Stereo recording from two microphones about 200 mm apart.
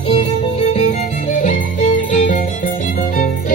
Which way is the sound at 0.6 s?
35° left (ahead or behind).